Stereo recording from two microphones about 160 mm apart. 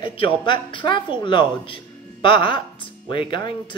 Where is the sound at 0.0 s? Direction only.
30° left (ahead or behind).